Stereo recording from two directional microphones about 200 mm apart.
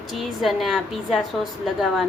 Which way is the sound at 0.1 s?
Centre (ahead or behind).